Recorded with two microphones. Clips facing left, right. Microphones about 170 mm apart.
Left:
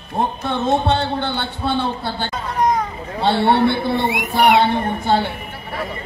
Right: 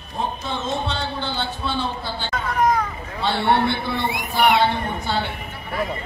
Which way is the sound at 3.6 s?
55° left (ahead or behind).